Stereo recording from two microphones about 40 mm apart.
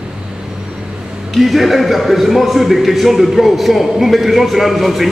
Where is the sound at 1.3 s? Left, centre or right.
Centre.